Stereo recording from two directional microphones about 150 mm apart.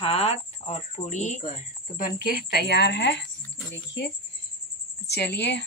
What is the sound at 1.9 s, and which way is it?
A woman's voice, 75° left (ahead or behind).